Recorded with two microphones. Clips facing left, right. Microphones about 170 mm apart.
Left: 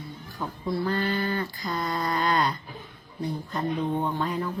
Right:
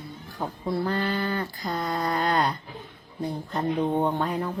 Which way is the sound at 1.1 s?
60° right (ahead or behind).